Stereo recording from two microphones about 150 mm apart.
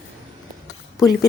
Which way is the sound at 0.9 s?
25° left (ahead or behind).